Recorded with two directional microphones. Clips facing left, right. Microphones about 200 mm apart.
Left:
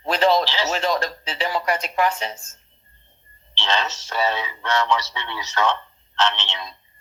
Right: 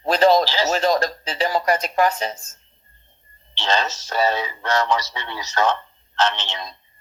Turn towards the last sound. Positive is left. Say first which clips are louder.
# right 1 dB
turn(degrees=-40)  # may be behind; listen again after turning